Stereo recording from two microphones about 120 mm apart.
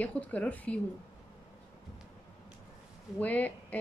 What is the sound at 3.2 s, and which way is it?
Speech, 15° left (ahead or behind).